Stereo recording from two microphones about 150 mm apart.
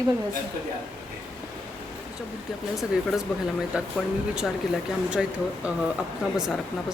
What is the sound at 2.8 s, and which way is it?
Speech, centre (ahead or behind).